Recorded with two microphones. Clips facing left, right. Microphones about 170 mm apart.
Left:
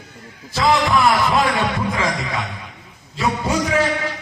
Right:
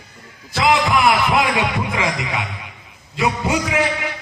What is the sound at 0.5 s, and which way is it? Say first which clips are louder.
A man's voice: even; 15° right (ahead or behind).